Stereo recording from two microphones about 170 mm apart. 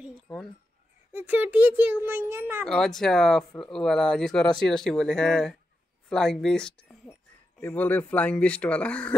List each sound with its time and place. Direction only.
1.1 s a child's voice: 10° right (ahead or behind)
2.6 s speech: 5° left (ahead or behind)